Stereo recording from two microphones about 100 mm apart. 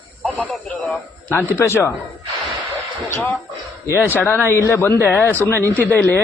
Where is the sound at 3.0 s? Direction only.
25° left (ahead or behind).